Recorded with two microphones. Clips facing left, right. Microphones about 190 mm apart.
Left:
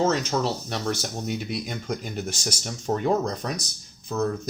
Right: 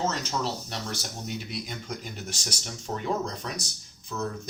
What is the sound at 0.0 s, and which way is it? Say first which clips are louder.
Speech: left 6 dB; 60° left (ahead or behind).